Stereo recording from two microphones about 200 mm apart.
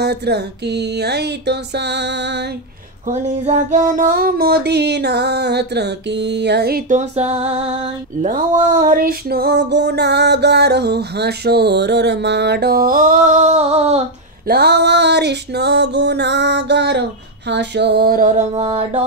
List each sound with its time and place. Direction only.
0.0 s music: 55° right (ahead or behind)
3.1 s a sound: 35° right (ahead or behind)
8.6 s music: 45° right (ahead or behind)
14.5 s music: 55° right (ahead or behind)
17.5 s a sound: 60° right (ahead or behind); by 18.4 s 45° right (ahead or behind)
18.5 s mantra: 25° right (ahead or behind)